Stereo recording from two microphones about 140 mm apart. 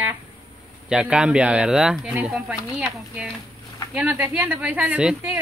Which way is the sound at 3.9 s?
10° right (ahead or behind).